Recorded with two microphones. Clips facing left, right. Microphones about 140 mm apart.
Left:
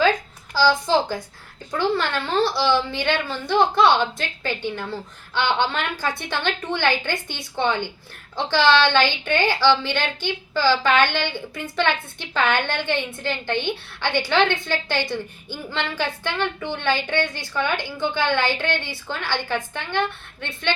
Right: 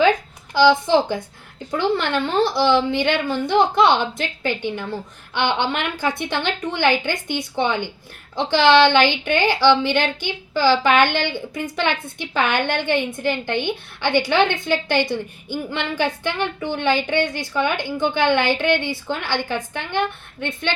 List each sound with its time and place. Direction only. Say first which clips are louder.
0.5 s a woman's voice: right 4 dB; 20° right (ahead or behind)